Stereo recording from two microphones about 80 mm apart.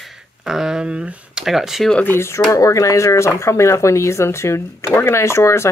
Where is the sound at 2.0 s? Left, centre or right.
Left.